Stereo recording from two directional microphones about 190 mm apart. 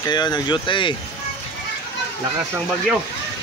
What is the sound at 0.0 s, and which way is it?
Speech, 20° left (ahead or behind).